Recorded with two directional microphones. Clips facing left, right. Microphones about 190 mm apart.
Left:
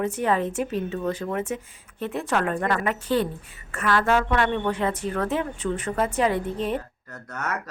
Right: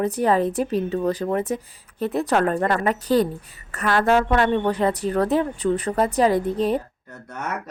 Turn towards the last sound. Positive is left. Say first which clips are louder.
# right 1 dB
turn(degrees=-10)  # may be behind; listen again after turning